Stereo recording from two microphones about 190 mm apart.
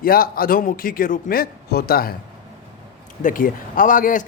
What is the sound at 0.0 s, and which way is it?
A man's voice, 50° left (ahead or behind).